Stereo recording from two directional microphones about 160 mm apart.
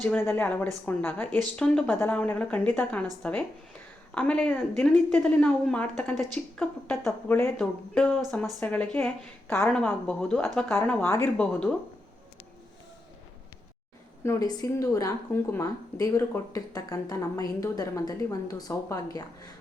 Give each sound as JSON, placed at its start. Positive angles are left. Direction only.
{"t": 0.0, "sound": "speech", "side_deg": 15}
{"t": 14.3, "sound": "a woman's voice", "side_deg": 25}